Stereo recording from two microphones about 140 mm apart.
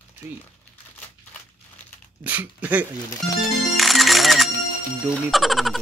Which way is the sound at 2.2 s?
10° right (ahead or behind).